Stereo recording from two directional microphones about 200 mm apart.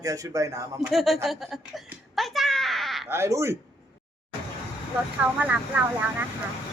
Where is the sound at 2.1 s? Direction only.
Centre (ahead or behind).